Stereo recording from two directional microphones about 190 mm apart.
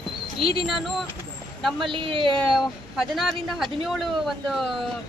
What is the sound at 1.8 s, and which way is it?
Speech, 25° right (ahead or behind).